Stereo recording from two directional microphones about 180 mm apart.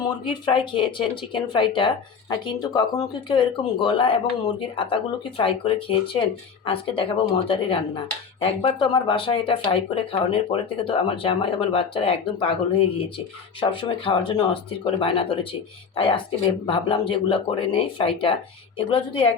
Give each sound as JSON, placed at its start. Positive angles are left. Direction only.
{"t": 0.0, "sound": "speech", "side_deg": 25}